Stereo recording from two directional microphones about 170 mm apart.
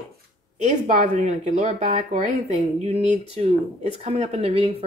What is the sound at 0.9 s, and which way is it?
Speech, 45° right (ahead or behind).